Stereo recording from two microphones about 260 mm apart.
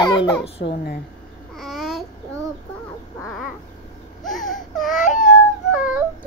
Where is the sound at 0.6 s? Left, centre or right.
Left.